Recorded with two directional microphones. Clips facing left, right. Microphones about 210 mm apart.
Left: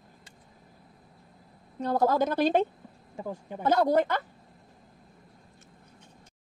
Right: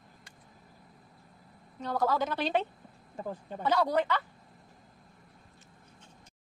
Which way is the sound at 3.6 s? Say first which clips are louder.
Left 4 dB; 45° left (ahead or behind).